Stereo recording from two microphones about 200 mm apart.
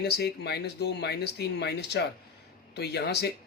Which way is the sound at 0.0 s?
55° left (ahead or behind).